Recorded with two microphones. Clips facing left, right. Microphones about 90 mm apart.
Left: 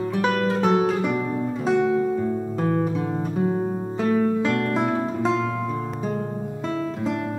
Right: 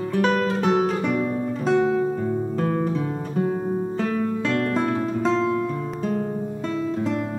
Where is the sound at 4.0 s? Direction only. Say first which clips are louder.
Left 8 dB; 10° left (ahead or behind).